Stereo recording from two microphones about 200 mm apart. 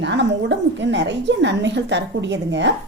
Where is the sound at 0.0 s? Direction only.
60° right (ahead or behind).